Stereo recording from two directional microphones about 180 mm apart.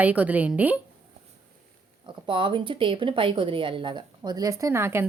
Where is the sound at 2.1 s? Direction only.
25° right (ahead or behind).